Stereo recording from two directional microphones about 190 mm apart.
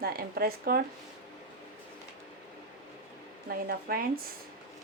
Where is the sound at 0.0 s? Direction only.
50° right (ahead or behind).